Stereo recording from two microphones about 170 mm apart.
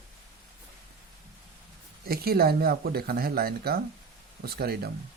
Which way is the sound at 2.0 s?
65° right (ahead or behind).